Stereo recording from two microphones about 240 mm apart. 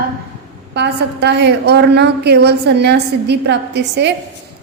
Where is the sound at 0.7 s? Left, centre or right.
Right.